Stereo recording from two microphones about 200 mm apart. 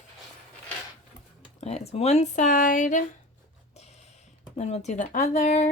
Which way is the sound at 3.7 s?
35° left (ahead or behind).